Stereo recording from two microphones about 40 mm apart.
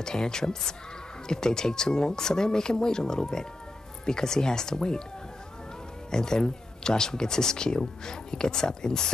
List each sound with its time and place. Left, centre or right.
0.0 s speech: centre
6.0 s speech: centre